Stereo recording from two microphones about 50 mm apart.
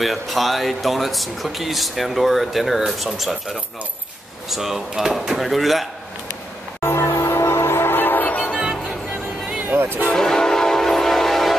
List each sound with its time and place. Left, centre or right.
0.0 s speech: centre
5.3 s speech: centre
6.8 s music: left
8.5 s music: centre
9.7 s vehicle: right
10.1 s music: centre